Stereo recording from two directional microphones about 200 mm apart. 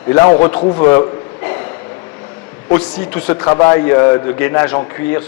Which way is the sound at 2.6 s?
10° left (ahead or behind).